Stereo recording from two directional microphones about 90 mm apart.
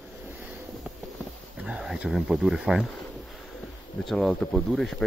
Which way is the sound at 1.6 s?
5° right (ahead or behind).